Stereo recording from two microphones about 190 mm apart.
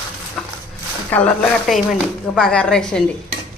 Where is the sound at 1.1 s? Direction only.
5° left (ahead or behind).